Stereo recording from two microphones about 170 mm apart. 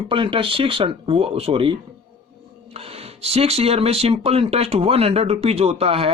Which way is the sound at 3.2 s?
35° right (ahead or behind).